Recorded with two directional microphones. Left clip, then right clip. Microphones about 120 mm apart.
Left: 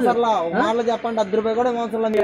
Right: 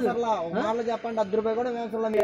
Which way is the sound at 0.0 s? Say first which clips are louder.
Left 8 dB; 35° right (ahead or behind).